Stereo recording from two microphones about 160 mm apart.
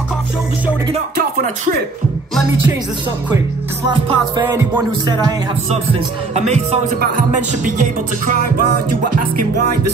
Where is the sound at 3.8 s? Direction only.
25° right (ahead or behind).